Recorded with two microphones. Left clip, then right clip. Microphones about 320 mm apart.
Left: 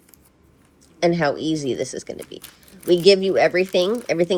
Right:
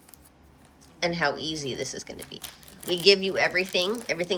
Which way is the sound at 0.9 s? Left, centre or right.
Centre.